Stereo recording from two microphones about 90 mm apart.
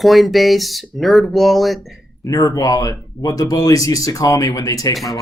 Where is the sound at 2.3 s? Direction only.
35° left (ahead or behind).